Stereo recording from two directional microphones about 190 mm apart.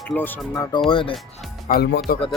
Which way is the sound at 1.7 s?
55° left (ahead or behind).